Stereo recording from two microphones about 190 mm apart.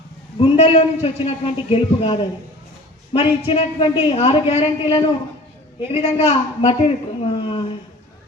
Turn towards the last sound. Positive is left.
turn(degrees=30)  # may be behind; listen again after turning